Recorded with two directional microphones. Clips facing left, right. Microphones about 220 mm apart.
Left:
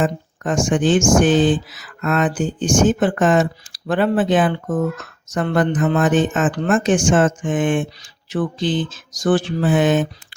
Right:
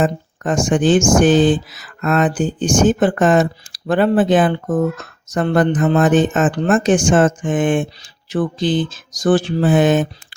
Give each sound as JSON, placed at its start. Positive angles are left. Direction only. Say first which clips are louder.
{"t": 0.0, "sound": "speech", "louder": "right 2 dB", "side_deg": -40}